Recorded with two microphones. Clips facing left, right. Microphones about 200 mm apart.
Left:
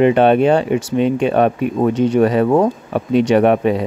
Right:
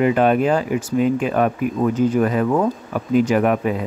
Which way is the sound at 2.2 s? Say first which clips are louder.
Left 5 dB; 35° left (ahead or behind).